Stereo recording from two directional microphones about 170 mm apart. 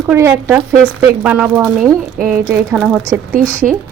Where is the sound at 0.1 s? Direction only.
15° right (ahead or behind).